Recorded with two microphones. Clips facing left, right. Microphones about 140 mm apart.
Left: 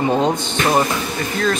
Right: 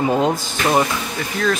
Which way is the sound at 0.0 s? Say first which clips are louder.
Even; 5° right (ahead or behind).